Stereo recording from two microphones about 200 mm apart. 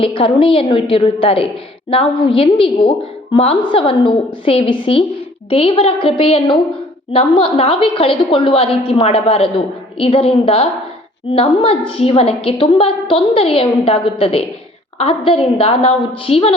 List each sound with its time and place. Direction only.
0.0 s a woman's voice: 25° left (ahead or behind)